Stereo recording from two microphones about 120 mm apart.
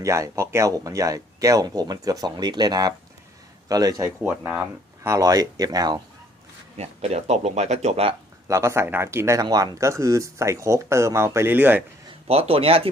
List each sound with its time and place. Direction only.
0.0 s speech: 25° right (ahead or behind)
4.2 s speech: 15° right (ahead or behind)
5.0 s speech: 30° right (ahead or behind)
6.7 s speech: 65° right (ahead or behind)
8.4 s speech: 25° right (ahead or behind)
12.3 s speech: 55° right (ahead or behind)